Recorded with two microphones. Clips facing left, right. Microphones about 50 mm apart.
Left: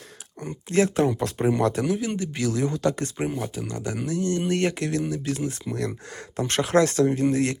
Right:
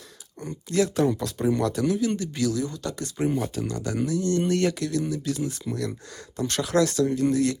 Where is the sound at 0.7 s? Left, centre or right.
Left.